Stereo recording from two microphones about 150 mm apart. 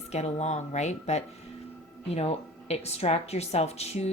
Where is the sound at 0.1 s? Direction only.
45° left (ahead or behind).